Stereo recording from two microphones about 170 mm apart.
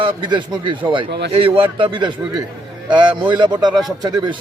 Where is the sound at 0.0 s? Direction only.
25° right (ahead or behind).